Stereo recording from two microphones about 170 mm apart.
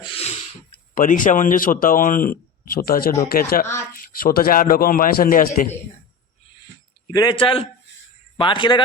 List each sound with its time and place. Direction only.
0.0 s a sound: 35° left (ahead or behind)
0.9 s a man's voice: 50° left (ahead or behind)
7.1 s a man's voice: 25° left (ahead or behind)